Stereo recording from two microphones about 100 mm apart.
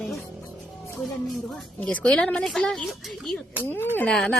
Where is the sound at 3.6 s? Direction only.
20° left (ahead or behind).